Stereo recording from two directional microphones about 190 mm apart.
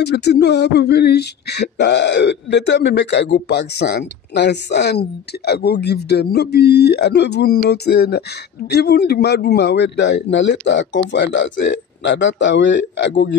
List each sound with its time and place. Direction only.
0.0 s a man's voice: 60° left (ahead or behind)